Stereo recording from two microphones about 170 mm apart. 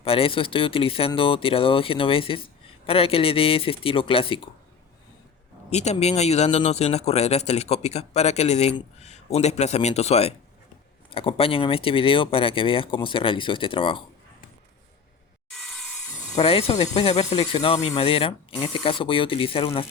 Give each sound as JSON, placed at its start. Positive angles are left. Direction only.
{"t": 0.0, "sound": "speech", "side_deg": 35}
{"t": 5.7, "sound": "speech", "side_deg": 40}
{"t": 15.4, "sound": "wood", "side_deg": 0}
{"t": 16.3, "sound": "speech", "side_deg": 35}